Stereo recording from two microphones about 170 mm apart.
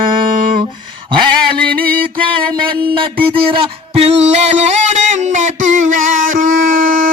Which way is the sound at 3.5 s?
35° right (ahead or behind).